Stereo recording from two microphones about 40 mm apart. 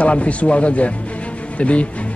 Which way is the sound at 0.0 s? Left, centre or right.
Left.